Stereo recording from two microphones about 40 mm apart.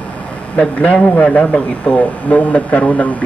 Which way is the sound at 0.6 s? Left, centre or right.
Left.